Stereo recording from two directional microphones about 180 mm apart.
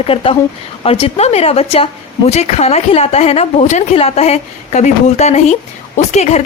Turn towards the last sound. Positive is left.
turn(degrees=40)  # may be behind; listen again after turning